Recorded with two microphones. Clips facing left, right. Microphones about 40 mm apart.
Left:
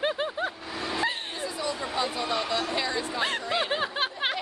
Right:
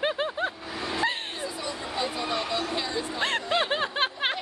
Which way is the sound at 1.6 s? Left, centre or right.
Left.